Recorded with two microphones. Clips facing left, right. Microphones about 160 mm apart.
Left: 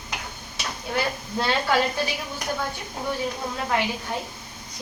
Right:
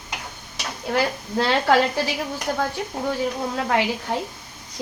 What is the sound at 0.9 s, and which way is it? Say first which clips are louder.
Speech: right 4 dB; 90° right.